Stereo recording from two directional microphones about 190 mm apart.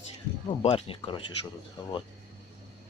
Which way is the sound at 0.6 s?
30° left (ahead or behind).